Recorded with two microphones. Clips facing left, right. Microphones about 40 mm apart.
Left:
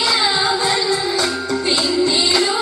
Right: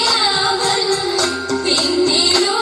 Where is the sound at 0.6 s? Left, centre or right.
Centre.